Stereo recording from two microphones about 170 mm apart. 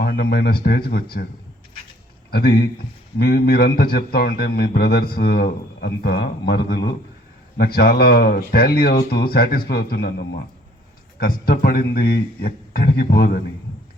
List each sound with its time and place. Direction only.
0.0 s a man's voice: 60° left (ahead or behind)
2.3 s a man's voice: 60° left (ahead or behind)